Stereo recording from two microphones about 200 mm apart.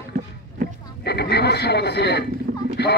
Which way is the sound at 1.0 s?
55° left (ahead or behind).